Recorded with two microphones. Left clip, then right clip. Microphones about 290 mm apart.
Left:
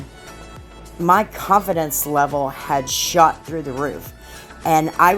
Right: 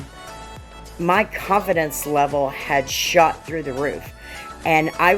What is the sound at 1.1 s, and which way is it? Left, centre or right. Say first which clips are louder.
Speech: left 3 dB; left.